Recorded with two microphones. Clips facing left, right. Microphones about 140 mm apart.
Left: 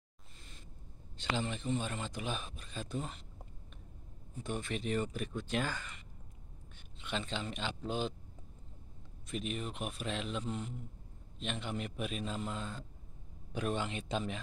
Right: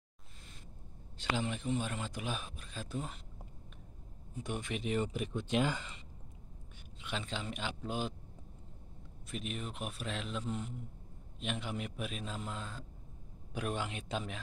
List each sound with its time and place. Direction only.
1.1 s speech: 5° right (ahead or behind)
4.4 s speech: 15° right (ahead or behind)
7.0 s speech: 5° right (ahead or behind)
9.3 s speech: centre (ahead or behind)